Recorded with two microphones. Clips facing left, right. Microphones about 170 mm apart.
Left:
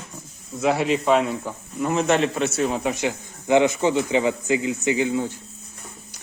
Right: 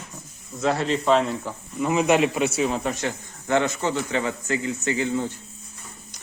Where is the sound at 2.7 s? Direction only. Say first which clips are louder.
Left 2 dB; 10° left (ahead or behind).